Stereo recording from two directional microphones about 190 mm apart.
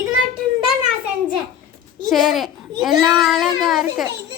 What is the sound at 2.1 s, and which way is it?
A woman's voice, centre (ahead or behind).